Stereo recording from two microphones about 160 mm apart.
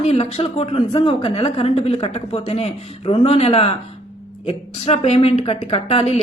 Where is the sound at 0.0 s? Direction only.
40° left (ahead or behind).